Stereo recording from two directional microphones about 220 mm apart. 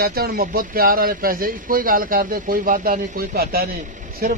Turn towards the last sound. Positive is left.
turn(degrees=-45)  # may be behind; listen again after turning